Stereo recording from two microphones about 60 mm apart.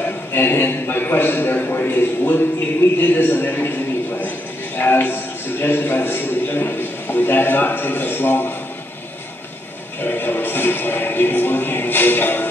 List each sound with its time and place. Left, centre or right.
0.0 s a man's voice: left
10.0 s music: left